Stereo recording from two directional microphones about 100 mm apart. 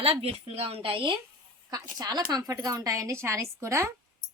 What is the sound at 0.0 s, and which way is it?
A woman's voice, 80° right.